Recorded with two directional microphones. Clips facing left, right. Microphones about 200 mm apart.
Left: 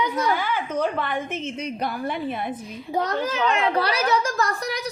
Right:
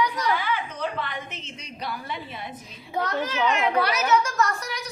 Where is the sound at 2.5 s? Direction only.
35° left (ahead or behind).